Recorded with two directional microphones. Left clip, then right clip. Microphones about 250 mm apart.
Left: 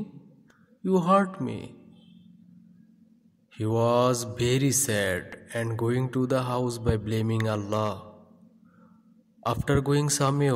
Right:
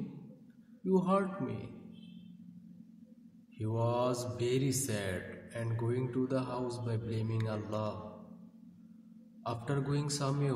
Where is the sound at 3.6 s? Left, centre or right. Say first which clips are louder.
Left 10 dB; left.